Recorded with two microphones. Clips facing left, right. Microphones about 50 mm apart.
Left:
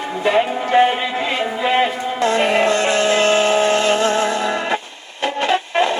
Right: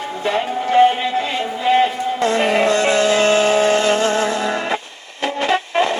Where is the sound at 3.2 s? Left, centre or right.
Centre.